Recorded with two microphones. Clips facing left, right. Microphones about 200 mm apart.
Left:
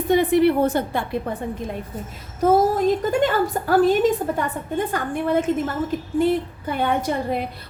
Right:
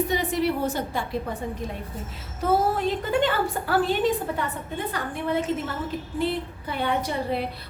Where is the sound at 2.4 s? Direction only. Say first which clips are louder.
Left 6 dB; 45° left (ahead or behind).